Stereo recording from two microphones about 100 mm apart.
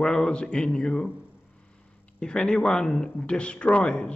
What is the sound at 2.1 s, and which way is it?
Speech, 10° left (ahead or behind).